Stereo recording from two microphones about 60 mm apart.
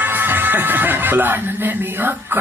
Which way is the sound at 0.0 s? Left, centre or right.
Right.